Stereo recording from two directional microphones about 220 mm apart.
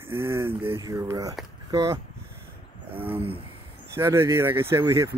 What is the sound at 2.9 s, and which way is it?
Speech, 10° right (ahead or behind).